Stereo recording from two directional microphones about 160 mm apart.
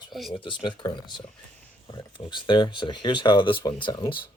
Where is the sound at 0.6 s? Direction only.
30° left (ahead or behind).